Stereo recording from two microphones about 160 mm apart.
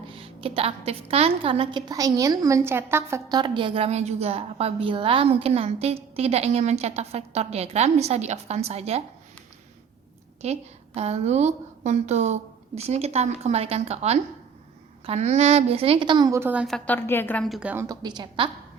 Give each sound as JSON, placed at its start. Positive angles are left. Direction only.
{"t": 0.1, "sound": "a woman's voice", "side_deg": -35}
{"t": 10.4, "sound": "a woman's voice", "side_deg": -40}
{"t": 16.6, "sound": "a woman's voice", "side_deg": 5}
{"t": 17.8, "sound": "a woman's voice", "side_deg": -25}